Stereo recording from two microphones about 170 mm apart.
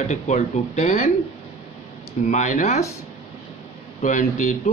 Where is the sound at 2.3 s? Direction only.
45° left (ahead or behind).